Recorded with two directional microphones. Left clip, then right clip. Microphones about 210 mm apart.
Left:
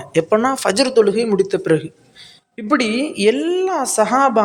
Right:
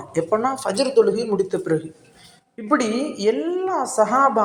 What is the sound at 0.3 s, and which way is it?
A woman's voice, 40° left (ahead or behind).